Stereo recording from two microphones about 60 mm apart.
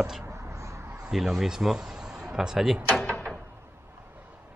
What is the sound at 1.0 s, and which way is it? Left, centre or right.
Speech, centre.